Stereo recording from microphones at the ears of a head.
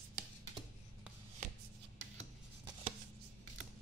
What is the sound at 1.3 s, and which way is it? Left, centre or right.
Shuffle, right.